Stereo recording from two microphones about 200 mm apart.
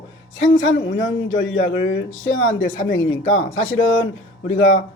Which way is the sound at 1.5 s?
75° left (ahead or behind).